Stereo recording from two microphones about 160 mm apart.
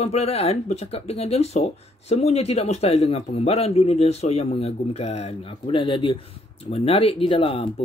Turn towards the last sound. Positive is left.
turn(degrees=35)  # may be behind; listen again after turning